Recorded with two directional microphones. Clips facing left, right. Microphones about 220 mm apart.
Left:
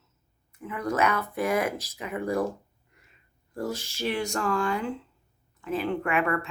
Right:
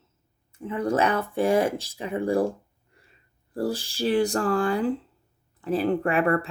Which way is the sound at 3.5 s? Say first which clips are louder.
Right 5 dB; 35° right (ahead or behind).